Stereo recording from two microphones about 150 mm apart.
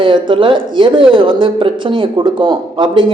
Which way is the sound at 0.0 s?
35° right (ahead or behind).